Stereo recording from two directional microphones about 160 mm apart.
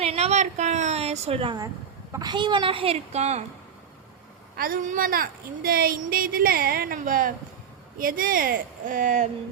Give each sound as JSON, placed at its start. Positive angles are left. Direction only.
{"t": 0.0, "sound": "a woman's voice", "side_deg": -40}
{"t": 4.5, "sound": "speech", "side_deg": -65}